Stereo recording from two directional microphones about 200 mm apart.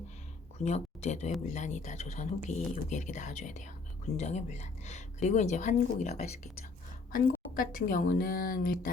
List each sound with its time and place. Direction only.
0.6 s a woman's voice: 35° left (ahead or behind)